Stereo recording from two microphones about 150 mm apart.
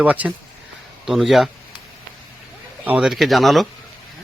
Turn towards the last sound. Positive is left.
turn(degrees=0)  # may be behind; listen again after turning